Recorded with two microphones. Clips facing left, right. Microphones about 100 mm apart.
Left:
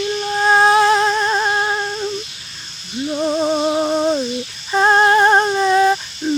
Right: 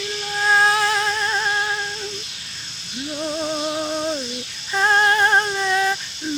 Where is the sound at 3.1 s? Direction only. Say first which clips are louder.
Left 7 dB; 45° left (ahead or behind).